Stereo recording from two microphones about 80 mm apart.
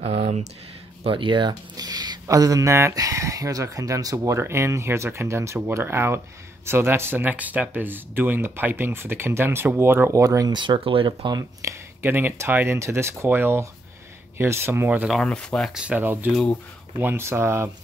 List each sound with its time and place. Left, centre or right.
1.1 s speech: right
1.5 s a sound: right
2.2 s speech: right
10.2 s speech: right
10.5 s speech: right
11.6 s speech: right
15.0 s speech: centre
15.7 s speech: centre
16.0 s speech: right